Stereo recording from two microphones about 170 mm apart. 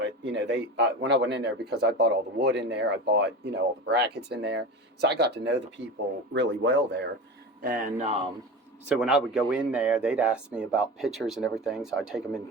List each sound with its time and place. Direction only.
0.0 s speech: 90° right
5.8 s speech: 90° right
7.6 s speech: 55° right (ahead or behind)
8.9 s speech: 5° right (ahead or behind)